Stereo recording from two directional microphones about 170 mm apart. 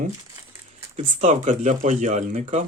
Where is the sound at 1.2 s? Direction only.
45° right (ahead or behind).